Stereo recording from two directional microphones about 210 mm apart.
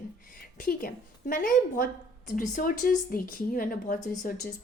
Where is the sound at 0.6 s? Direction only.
45° left (ahead or behind).